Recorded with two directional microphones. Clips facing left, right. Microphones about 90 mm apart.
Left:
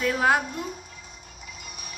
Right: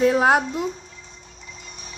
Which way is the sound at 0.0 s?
40° right (ahead or behind).